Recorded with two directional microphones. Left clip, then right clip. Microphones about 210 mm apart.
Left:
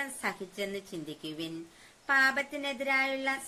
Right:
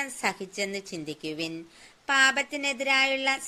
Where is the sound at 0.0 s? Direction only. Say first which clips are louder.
Right 5 dB; 35° right (ahead or behind).